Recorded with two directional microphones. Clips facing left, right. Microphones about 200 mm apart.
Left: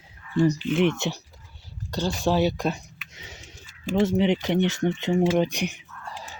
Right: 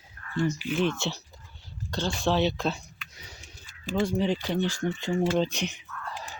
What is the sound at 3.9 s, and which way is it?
Speech, 20° left (ahead or behind).